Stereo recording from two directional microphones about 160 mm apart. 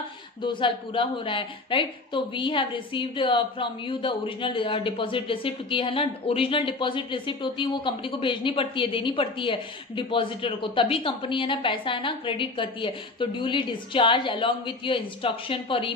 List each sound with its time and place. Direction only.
0.4 s a woman's voice: 30° left (ahead or behind)